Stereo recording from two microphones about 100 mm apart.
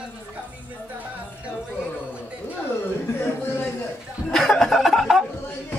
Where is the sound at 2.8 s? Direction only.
25° left (ahead or behind).